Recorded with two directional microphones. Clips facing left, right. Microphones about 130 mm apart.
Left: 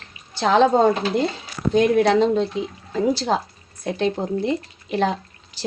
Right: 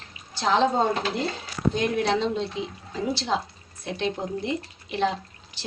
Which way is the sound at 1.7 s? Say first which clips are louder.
Left 10 dB; 55° left (ahead or behind).